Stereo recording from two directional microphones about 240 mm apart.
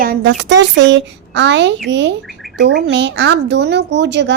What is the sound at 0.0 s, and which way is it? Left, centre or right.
Speech, right.